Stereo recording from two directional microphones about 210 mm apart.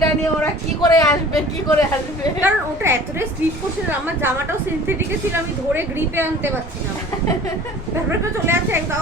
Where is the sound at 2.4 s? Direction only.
10° right (ahead or behind).